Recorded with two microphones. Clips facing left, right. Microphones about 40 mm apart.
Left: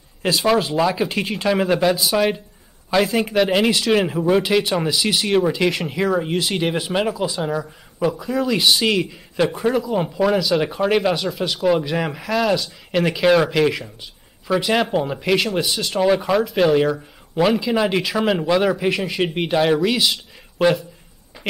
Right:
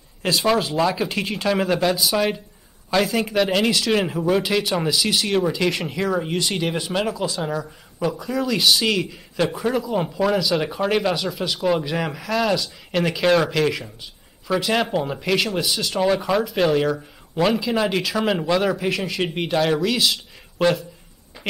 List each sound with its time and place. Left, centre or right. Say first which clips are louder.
0.2 s speech: left 2 dB; centre